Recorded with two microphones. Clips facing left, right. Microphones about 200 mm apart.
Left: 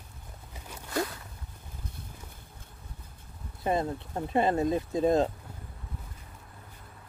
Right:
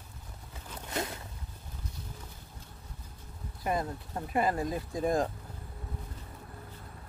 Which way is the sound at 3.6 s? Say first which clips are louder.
Left 4 dB; 25° left (ahead or behind).